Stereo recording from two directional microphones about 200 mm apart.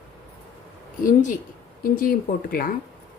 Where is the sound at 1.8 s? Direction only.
45° left (ahead or behind).